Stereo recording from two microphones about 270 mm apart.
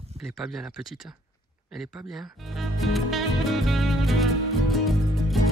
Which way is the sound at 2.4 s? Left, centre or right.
Centre.